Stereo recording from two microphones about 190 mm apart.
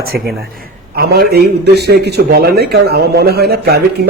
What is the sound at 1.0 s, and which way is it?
A man's voice, 55° right (ahead or behind).